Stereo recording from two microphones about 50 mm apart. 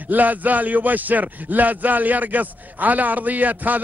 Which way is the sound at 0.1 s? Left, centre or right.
Right.